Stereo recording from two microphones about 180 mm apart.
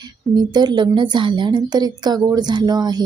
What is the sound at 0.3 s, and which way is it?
Speech, 25° right (ahead or behind).